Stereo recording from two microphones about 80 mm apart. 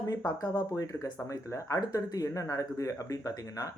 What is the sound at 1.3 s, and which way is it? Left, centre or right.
Speech, left.